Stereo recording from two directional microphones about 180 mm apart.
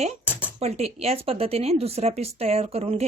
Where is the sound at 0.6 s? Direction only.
35° right (ahead or behind).